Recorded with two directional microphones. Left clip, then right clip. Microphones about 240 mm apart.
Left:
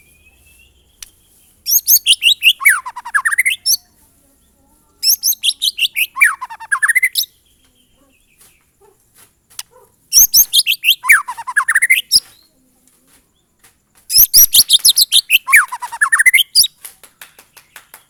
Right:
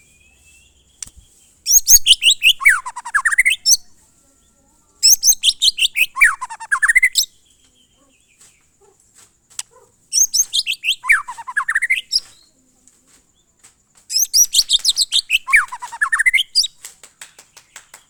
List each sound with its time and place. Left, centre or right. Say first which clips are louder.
1.0 s a sound: right 1 dB; centre
1.6 s chirp: right 2 dB; centre
4.9 s bird: right 3 dB; centre
9.1 s a sound: even; centre
10.1 s bird: left 5 dB; centre
14.1 s bird: left 4 dB; centre
16.8 s clapping: even; centre